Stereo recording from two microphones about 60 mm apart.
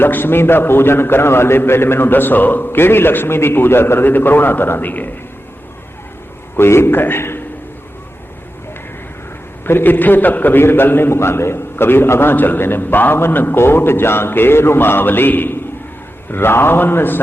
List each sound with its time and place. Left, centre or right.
0.0 s a man's voice: left
6.6 s a man's voice: left
9.6 s a man's voice: left